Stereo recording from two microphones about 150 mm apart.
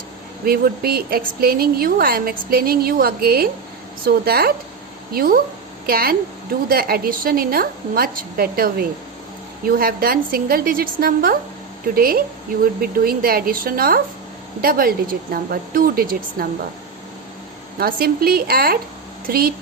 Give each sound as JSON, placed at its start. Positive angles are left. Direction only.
{"t": 0.4, "sound": "a woman's voice", "side_deg": -90}
{"t": 5.1, "sound": "a woman's voice", "side_deg": -80}
{"t": 17.7, "sound": "a woman's voice", "side_deg": -80}